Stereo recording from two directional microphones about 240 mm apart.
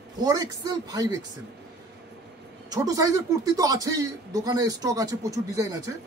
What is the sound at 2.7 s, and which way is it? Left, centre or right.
Speech, centre.